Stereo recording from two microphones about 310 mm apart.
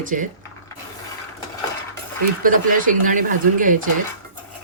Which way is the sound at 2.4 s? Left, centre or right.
Right.